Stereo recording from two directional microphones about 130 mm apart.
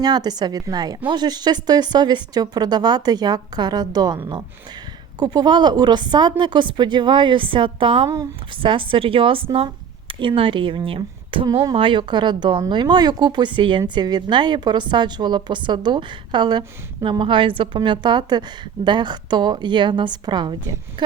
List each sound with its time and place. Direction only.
0.0 s speech: 30° right (ahead or behind)
5.2 s speech: 30° right (ahead or behind)